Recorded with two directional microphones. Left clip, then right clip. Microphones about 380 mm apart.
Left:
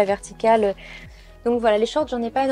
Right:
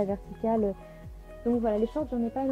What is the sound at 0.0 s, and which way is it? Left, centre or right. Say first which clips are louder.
A woman's voice: left 11 dB; centre.